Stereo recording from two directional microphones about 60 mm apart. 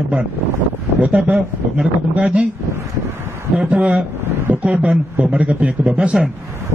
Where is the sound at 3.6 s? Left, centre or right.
Right.